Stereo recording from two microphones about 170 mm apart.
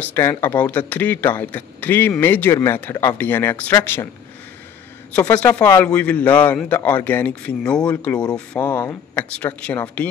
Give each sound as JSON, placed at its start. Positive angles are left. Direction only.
{"t": 0.0, "sound": "a man's voice", "side_deg": 15}
{"t": 5.1, "sound": "a man's voice", "side_deg": 10}
{"t": 8.3, "sound": "speech", "side_deg": 25}
{"t": 9.1, "sound": "a man's voice", "side_deg": 10}